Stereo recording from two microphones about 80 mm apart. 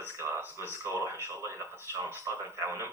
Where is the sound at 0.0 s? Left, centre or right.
Right.